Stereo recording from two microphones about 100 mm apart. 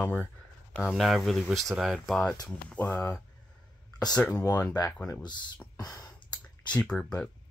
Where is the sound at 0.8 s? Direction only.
Centre (ahead or behind).